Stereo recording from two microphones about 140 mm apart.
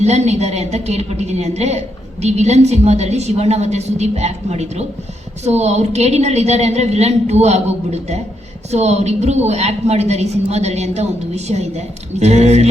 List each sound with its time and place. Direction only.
0.0 s a woman's voice: 50° right (ahead or behind)
8.7 s a woman's voice: 50° right (ahead or behind)